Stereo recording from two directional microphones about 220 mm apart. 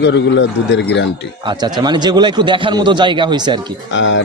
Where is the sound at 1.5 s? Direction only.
20° right (ahead or behind).